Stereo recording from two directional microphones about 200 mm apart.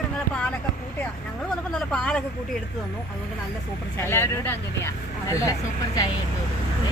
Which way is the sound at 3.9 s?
10° left (ahead or behind).